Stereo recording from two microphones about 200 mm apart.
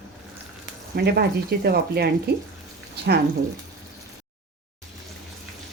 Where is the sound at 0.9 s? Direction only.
55° right (ahead or behind).